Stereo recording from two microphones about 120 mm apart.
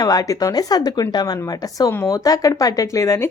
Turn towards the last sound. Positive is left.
turn(degrees=25)  # may be behind; listen again after turning